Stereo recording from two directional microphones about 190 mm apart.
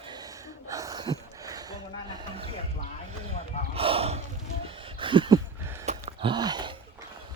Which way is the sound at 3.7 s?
30° right (ahead or behind).